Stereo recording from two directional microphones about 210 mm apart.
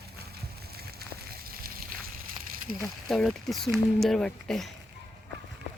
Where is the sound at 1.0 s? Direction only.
45° right (ahead or behind).